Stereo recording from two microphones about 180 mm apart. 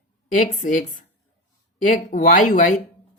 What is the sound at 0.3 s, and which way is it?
Speech, 45° left (ahead or behind).